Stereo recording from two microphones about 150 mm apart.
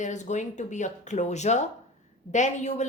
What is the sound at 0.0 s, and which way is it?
A woman's voice, 55° left (ahead or behind).